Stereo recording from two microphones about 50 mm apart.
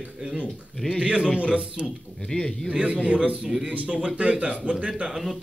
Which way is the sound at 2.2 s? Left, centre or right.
Centre.